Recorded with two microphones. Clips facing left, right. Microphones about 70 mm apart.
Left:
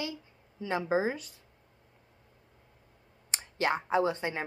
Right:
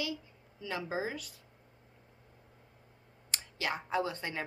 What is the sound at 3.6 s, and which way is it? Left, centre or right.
Speech, left.